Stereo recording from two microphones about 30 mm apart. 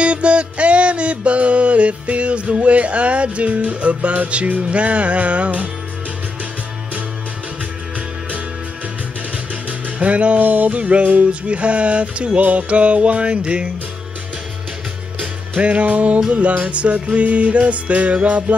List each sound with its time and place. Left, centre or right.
0.0 s music: right
9.9 s music: right
10.4 s music: right
10.7 s music: right
13.4 s music: right
15.1 s music: right